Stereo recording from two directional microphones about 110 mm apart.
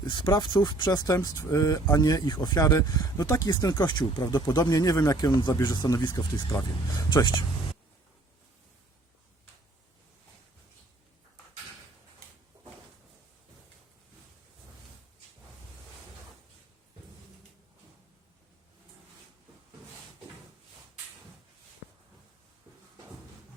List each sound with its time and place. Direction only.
0.0 s speech: 40° left (ahead or behind)